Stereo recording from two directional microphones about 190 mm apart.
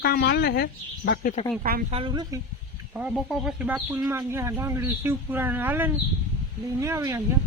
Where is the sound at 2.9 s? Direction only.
5° right (ahead or behind).